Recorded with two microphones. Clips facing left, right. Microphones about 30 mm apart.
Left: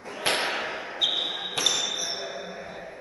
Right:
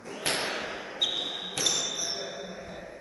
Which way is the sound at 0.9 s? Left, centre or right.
Left.